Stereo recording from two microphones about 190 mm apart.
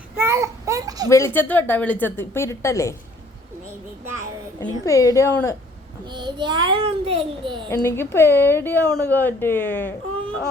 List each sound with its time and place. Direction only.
0.2 s a sound: 15° right (ahead or behind)
1.1 s a woman's voice: 10° left (ahead or behind)
4.9 s a woman's voice: 15° left (ahead or behind)
6.1 s a child's voice: 25° right (ahead or behind)
7.7 s a woman's voice: 15° left (ahead or behind)